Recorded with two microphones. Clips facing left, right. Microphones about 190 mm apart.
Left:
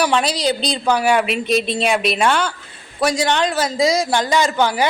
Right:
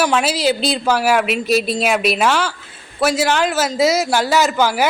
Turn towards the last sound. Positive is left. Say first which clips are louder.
# right 1 dB
turn(degrees=-5)  # may be behind; listen again after turning